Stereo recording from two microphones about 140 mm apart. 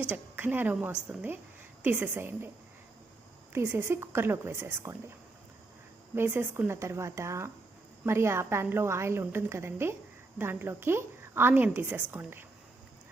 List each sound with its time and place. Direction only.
0.1 s a woman's voice: 15° right (ahead or behind)
3.5 s a woman's voice: 15° right (ahead or behind)
6.1 s a woman's voice: 15° right (ahead or behind)